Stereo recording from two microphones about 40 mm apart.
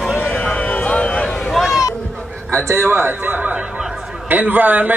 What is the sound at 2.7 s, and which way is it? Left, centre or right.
Speech, right.